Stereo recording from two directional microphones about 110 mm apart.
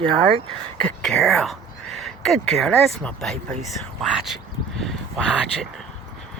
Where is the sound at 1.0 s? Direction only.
5° left (ahead or behind).